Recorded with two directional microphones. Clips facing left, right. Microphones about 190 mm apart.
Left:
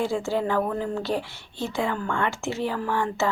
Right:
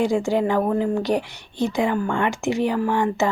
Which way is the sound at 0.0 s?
15° right (ahead or behind).